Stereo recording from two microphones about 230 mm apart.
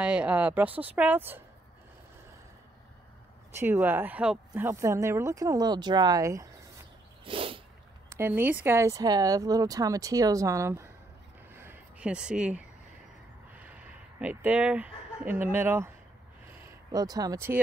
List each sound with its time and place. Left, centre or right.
0.0 s speech: centre
3.5 s speech: centre
7.2 s sneeze: right
8.1 s speech: centre
11.5 s a sound: centre
13.6 s speech: centre
16.9 s speech: centre